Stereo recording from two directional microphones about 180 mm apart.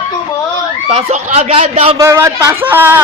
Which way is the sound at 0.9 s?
35° right (ahead or behind).